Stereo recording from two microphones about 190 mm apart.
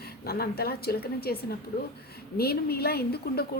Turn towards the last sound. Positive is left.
turn(degrees=55)  # may be behind; listen again after turning